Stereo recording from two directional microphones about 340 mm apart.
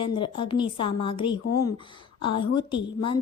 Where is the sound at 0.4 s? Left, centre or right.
Centre.